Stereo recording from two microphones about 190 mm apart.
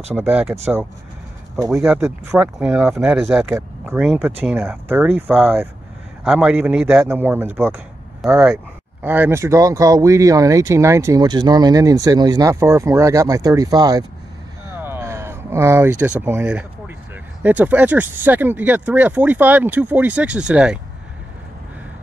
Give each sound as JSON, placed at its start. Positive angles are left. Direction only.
{"t": 0.1, "sound": "speech", "side_deg": -10}
{"t": 1.7, "sound": "speech", "side_deg": -5}
{"t": 14.8, "sound": "a sound", "side_deg": -15}
{"t": 17.4, "sound": "speech", "side_deg": -10}